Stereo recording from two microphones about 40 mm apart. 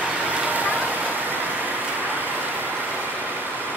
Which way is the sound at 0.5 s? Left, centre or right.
Right.